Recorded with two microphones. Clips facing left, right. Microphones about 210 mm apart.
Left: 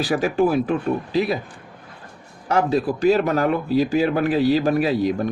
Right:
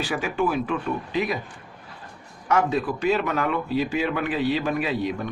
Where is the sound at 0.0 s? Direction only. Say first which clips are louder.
Left 6 dB; 40° left (ahead or behind).